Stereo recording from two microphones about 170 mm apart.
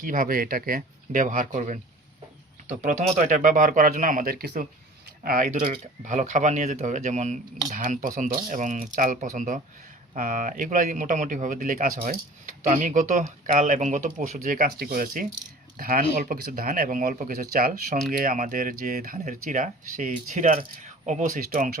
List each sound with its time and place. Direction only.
0.0 s speech: 55° right (ahead or behind)